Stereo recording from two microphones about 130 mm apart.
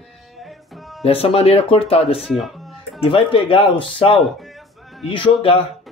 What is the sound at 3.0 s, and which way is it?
Speech, 45° left (ahead or behind).